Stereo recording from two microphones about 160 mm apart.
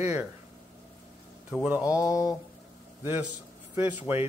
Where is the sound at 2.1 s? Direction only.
20° left (ahead or behind).